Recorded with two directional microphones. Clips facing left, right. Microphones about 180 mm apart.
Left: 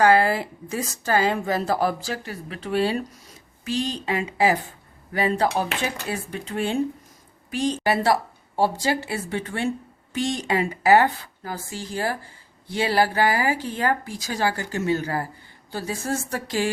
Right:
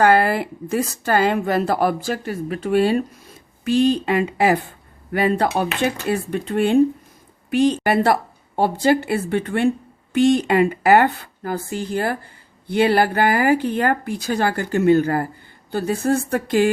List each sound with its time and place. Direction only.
0.0 s a woman's voice: 60° right (ahead or behind)